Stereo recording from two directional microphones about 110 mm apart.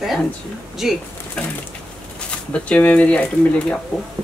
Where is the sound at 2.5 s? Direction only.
10° left (ahead or behind).